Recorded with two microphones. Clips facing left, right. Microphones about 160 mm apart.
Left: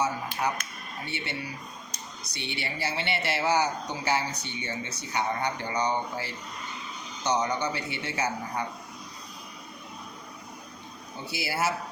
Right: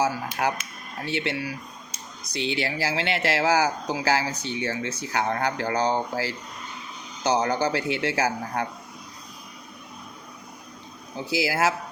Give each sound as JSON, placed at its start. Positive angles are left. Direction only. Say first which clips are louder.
{"t": 0.0, "sound": "a sound", "louder": "right 4 dB", "side_deg": -85}
{"t": 1.0, "sound": "speech", "louder": "right 8 dB", "side_deg": -90}
{"t": 11.3, "sound": "speech", "louder": "right 6 dB", "side_deg": -90}